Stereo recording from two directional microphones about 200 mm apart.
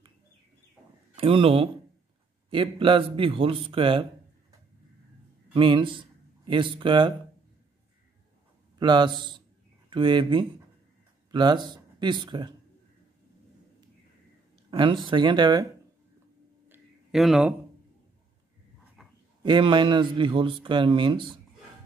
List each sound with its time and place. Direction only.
1.1 s speech: 30° right (ahead or behind)
5.5 s speech: 25° right (ahead or behind)
8.7 s a man's voice: 20° right (ahead or behind)
14.7 s speech: 25° right (ahead or behind)
16.6 s a sound: 5° right (ahead or behind)
19.0 s a sound: centre (ahead or behind)
19.4 s speech: 25° right (ahead or behind)